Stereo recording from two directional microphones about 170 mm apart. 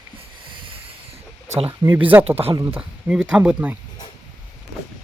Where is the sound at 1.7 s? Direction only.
15° right (ahead or behind).